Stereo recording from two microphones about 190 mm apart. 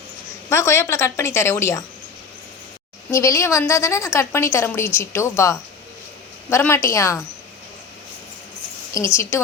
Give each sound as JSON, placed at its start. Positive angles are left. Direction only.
{"t": 0.5, "sound": "a woman's voice", "side_deg": 15}
{"t": 3.1, "sound": "a woman's voice", "side_deg": 15}
{"t": 8.9, "sound": "a woman's voice", "side_deg": 15}